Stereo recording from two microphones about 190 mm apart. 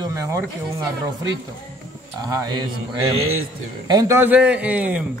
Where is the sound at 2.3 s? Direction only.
20° right (ahead or behind).